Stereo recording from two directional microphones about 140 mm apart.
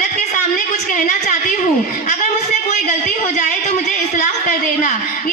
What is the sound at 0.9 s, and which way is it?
Speech, 70° left (ahead or behind).